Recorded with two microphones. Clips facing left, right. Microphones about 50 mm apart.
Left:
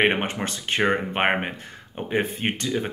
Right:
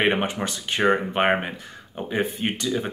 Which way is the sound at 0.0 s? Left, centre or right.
Left.